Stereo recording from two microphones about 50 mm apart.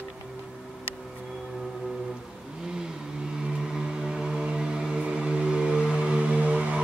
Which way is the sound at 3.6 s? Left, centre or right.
Centre.